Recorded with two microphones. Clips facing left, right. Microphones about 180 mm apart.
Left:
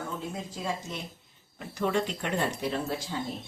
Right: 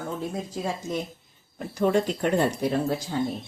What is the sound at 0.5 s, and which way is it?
Speech, 40° right (ahead or behind).